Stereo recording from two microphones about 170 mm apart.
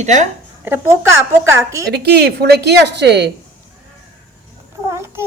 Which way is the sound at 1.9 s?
70° right (ahead or behind).